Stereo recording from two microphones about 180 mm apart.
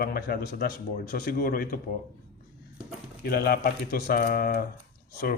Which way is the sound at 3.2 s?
60° left (ahead or behind).